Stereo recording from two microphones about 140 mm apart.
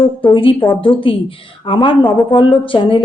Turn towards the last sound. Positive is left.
turn(degrees=40)  # may be behind; listen again after turning